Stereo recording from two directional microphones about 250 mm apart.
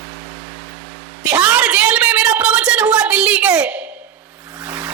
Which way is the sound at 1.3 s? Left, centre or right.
Centre.